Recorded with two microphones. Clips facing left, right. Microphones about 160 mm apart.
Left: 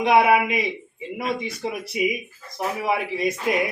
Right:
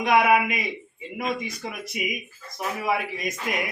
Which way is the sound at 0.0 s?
25° left (ahead or behind).